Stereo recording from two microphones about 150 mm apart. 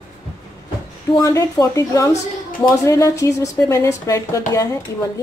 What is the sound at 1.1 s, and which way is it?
A woman's voice, 25° left (ahead or behind).